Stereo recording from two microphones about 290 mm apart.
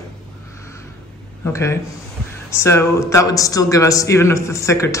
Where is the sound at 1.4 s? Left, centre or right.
Centre.